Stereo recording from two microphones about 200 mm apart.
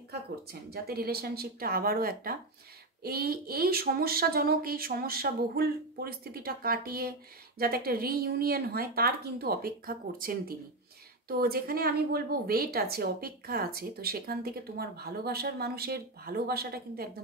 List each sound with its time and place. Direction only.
0.1 s speech: 50° right (ahead or behind)